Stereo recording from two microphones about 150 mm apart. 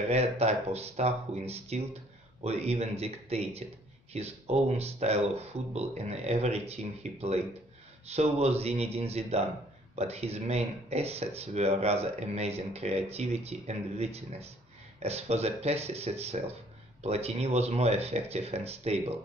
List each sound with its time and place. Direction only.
0.1 s speech: 45° right (ahead or behind)